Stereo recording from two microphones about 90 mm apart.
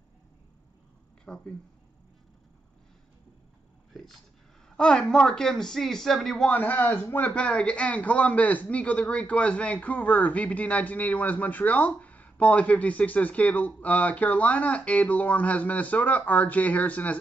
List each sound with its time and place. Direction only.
1.2 s a sound: 10° left (ahead or behind)
3.9 s speech: centre (ahead or behind)
6.5 s a man's voice: 20° left (ahead or behind)